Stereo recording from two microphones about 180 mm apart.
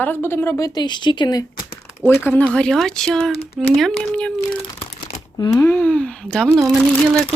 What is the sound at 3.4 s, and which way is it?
Speech, 35° left (ahead or behind).